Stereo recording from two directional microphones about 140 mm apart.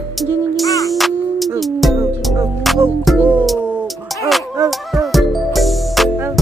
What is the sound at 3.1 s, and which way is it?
Music, 10° right (ahead or behind).